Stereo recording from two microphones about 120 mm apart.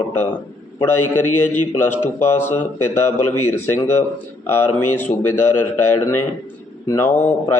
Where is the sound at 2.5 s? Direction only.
20° left (ahead or behind).